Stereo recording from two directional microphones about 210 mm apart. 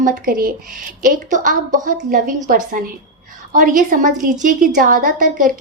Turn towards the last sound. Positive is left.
turn(degrees=-40)  # may be behind; listen again after turning